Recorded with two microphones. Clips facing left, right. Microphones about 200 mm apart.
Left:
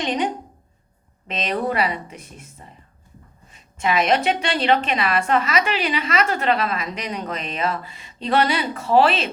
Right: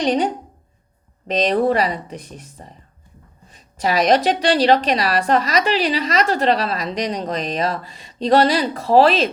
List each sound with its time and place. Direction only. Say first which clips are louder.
0.0 s a woman's voice: right 5 dB; 40° right (ahead or behind)
1.3 s a woman's voice: right 7 dB; 35° right (ahead or behind)